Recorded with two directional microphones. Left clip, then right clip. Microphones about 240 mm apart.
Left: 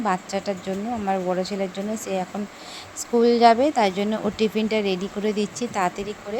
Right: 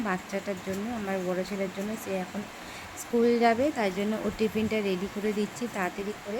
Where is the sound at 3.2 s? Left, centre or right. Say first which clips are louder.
Left 8 dB; left.